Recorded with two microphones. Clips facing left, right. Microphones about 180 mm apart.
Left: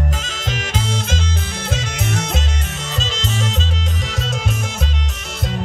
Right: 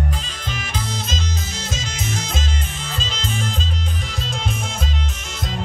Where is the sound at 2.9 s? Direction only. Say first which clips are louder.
Left 3 dB; 75° left (ahead or behind).